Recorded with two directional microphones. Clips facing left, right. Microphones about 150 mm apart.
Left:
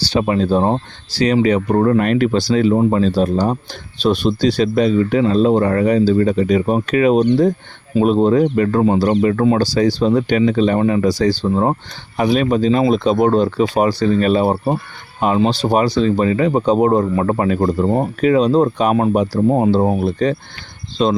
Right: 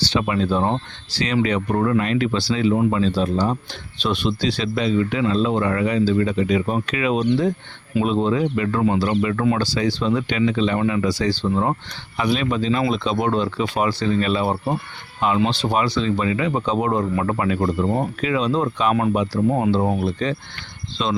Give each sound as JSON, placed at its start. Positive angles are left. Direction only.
{"t": 0.1, "sound": "speech", "side_deg": 35}